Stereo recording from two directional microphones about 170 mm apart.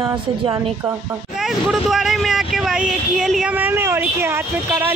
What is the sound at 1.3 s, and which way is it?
Speech, centre (ahead or behind).